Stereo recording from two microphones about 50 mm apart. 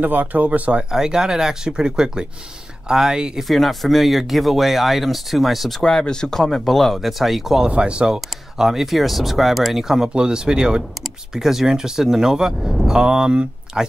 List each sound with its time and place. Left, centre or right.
0.0 s speech: right
0.8 s speech: centre
3.4 s speech: centre
5.8 s speech: centre
7.6 s speech: right